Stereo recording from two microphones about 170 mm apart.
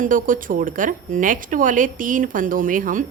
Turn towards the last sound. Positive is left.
turn(degrees=-50)  # may be behind; listen again after turning